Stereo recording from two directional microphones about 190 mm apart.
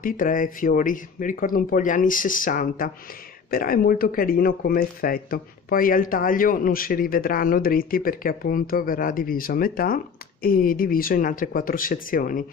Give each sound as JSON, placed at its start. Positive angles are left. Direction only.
{"t": 0.0, "sound": "speech", "side_deg": 45}